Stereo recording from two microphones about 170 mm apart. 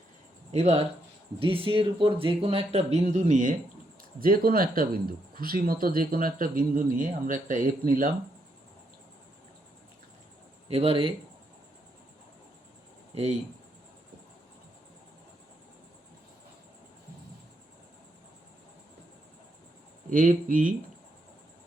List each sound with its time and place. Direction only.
0.5 s speech: 40° right (ahead or behind)
4.2 s speech: 60° right (ahead or behind)
10.7 s speech: 35° right (ahead or behind)
20.1 s speech: 50° right (ahead or behind)